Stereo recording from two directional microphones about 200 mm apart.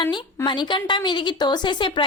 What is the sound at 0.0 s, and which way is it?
Speech, 20° left (ahead or behind).